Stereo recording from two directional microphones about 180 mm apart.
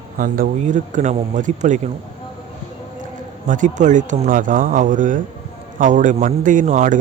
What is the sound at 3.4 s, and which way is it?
Speech, 45° right (ahead or behind).